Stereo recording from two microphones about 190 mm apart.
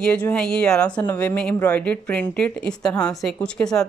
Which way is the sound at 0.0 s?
5° left (ahead or behind).